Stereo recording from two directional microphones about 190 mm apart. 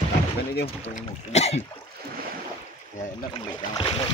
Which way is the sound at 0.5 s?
55° left (ahead or behind).